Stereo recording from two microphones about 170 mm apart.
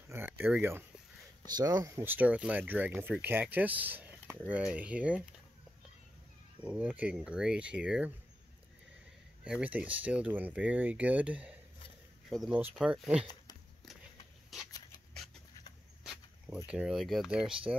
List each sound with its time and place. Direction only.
0.1 s speech: 10° right (ahead or behind)
6.6 s speech: 10° right (ahead or behind)
9.4 s speech: 5° right (ahead or behind)
16.0 s a sound: 5° right (ahead or behind)
16.6 s speech: 5° right (ahead or behind)